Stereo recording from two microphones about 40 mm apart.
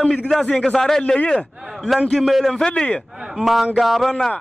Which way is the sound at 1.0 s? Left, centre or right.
Left.